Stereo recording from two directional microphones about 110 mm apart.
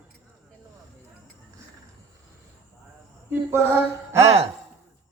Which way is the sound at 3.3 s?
20° right (ahead or behind).